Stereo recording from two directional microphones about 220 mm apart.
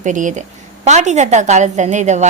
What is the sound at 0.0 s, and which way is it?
A woman's voice, 35° right (ahead or behind).